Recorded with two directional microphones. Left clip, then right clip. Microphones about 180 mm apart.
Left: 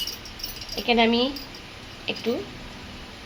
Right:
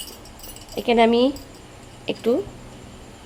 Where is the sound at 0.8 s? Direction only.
70° right (ahead or behind).